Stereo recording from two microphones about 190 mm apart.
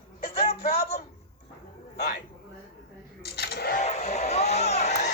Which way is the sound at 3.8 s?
35° left (ahead or behind).